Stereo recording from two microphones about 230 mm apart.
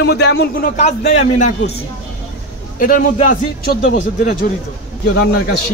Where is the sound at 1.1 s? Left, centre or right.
Left.